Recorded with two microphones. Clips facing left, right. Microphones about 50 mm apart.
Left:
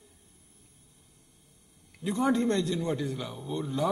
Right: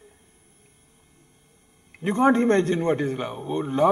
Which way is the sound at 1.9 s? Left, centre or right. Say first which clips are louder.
Right 8 dB; right.